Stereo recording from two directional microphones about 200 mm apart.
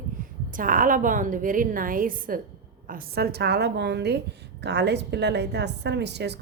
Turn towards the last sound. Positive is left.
turn(degrees=-55)  # may be behind; listen again after turning